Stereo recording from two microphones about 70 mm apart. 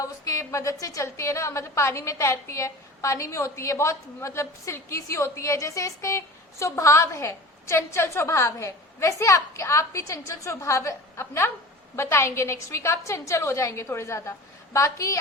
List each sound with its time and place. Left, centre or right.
0.0 s a woman's voice: left